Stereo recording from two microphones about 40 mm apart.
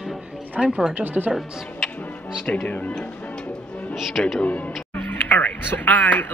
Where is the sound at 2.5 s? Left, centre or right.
Left.